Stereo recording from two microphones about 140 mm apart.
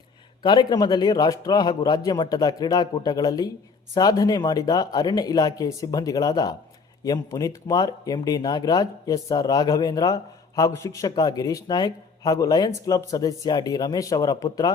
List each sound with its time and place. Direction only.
0.4 s speech: 30° left (ahead or behind)